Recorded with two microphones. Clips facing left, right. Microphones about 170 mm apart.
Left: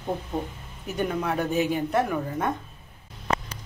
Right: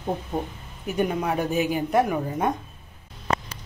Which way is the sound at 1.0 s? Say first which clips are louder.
Right 2 dB; 10° right (ahead or behind).